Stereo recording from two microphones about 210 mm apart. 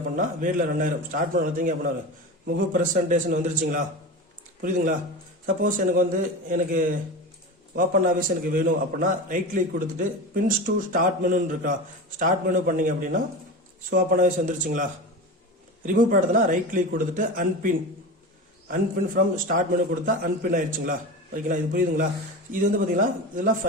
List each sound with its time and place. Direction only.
0.2 s a man's voice: 40° right (ahead or behind)
5.6 s a man's voice: 40° right (ahead or behind)
15.9 s a man's voice: 40° right (ahead or behind)
18.7 s a man's voice: 40° right (ahead or behind)